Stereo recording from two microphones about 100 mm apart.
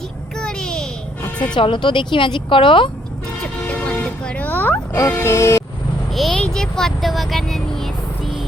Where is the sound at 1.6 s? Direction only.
55° left (ahead or behind).